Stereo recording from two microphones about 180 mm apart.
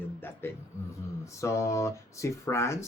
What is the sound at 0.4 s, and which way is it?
Speech, 15° left (ahead or behind).